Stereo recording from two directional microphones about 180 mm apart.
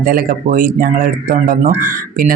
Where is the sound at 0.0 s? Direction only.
50° right (ahead or behind).